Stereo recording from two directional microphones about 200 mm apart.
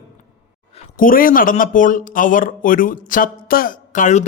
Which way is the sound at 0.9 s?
45° left (ahead or behind).